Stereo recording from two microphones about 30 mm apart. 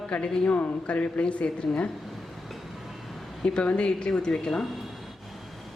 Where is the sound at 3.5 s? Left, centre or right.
Left.